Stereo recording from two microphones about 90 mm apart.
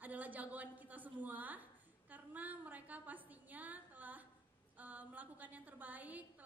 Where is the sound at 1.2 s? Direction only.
20° right (ahead or behind).